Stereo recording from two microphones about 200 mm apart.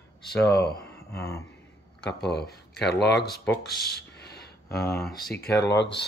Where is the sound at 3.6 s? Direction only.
50° left (ahead or behind).